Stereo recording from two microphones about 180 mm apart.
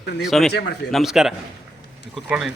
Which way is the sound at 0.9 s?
Centre (ahead or behind).